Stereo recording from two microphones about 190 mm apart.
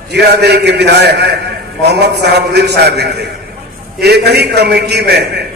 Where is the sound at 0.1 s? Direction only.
60° right (ahead or behind).